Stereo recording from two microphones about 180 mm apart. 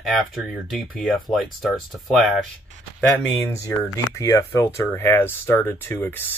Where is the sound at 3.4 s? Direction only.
15° left (ahead or behind).